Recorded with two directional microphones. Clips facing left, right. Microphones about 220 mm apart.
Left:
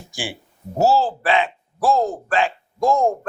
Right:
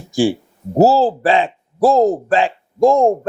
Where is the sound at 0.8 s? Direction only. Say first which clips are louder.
Right 6 dB; 35° right (ahead or behind).